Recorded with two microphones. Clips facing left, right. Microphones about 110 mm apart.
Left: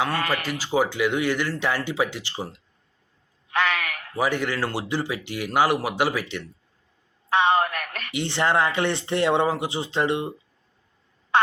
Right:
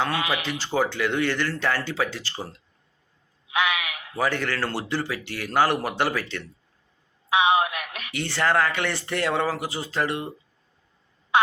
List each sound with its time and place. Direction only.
0.1 s speech: 10° right (ahead or behind)
0.4 s speech: 5° left (ahead or behind)
3.5 s a sound: 10° right (ahead or behind)
4.2 s speech: 15° left (ahead or behind)
7.3 s a sound: 10° right (ahead or behind)
8.1 s speech: 20° left (ahead or behind)